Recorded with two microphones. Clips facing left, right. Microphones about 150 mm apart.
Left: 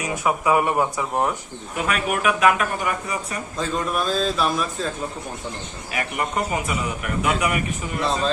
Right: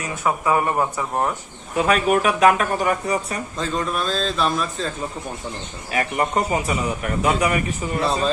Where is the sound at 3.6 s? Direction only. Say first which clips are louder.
Left 1 dB; 5° left (ahead or behind).